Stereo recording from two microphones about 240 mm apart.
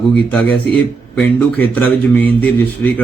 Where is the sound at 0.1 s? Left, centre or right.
Centre.